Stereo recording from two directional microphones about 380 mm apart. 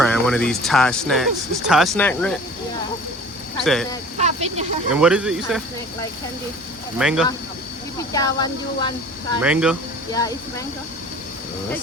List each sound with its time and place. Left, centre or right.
0.0 s speech: centre
3.6 s speech: centre
4.2 s vehicle: centre
4.9 s speech: centre
7.0 s speech: centre
8.1 s speech: centre
9.4 s speech: centre